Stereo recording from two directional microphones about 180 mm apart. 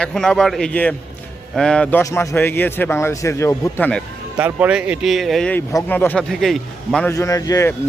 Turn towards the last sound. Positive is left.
turn(degrees=20)  # may be behind; listen again after turning